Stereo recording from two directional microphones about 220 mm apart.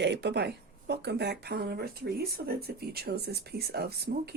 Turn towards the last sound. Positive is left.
turn(degrees=-45)  # may be behind; listen again after turning